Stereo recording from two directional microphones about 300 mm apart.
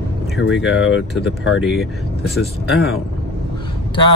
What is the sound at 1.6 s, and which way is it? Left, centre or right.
Mantra, centre.